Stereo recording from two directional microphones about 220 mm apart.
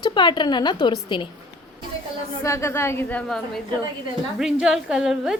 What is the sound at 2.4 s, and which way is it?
A woman's voice, 15° left (ahead or behind).